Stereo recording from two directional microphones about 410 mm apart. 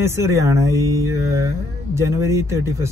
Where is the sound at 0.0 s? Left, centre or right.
Centre.